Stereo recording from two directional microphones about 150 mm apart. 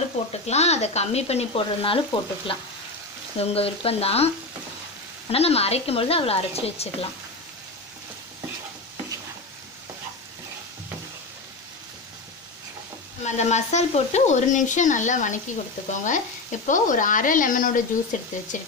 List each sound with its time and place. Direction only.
0.2 s speech: 45° left (ahead or behind)
5.3 s speech: 45° left (ahead or behind)
13.2 s speech: 50° left (ahead or behind)